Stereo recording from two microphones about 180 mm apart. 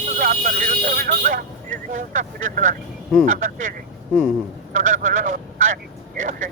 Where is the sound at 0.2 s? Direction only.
55° right (ahead or behind).